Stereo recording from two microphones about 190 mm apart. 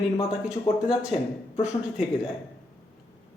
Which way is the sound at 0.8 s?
5° right (ahead or behind).